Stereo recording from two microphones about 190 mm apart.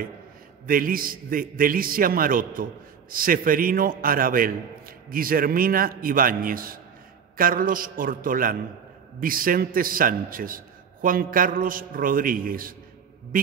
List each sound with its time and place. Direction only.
0.7 s a man's voice: 45° right (ahead or behind)